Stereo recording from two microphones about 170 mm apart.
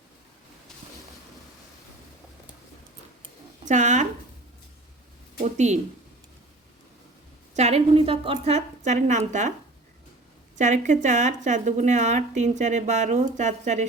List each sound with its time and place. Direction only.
3.7 s speech: 45° right (ahead or behind)
5.4 s a woman's voice: 45° right (ahead or behind)
7.5 s a woman's voice: 40° right (ahead or behind)
10.6 s speech: 45° right (ahead or behind)